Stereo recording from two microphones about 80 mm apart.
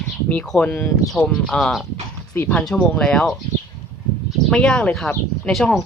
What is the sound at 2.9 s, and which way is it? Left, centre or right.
Speech, centre.